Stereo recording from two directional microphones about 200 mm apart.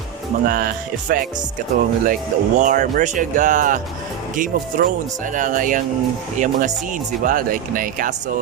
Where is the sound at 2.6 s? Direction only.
40° right (ahead or behind).